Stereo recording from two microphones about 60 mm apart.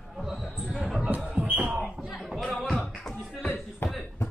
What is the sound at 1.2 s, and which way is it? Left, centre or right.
Music, centre.